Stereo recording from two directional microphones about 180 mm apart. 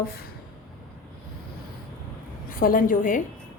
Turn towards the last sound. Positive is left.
turn(degrees=50)  # may be behind; listen again after turning